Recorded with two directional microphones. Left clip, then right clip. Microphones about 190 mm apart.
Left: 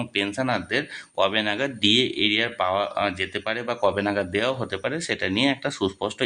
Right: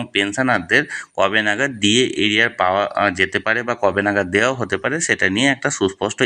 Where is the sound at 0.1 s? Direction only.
20° right (ahead or behind).